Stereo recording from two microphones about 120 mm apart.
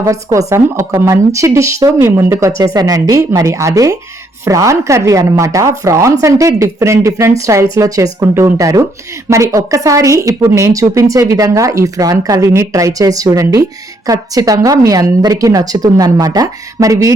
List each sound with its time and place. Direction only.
0.0 s a woman's voice: 30° right (ahead or behind)
2.7 s a woman's voice: 30° right (ahead or behind)